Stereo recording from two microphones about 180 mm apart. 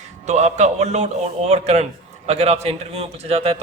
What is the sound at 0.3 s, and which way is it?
A man's voice, 40° right (ahead or behind).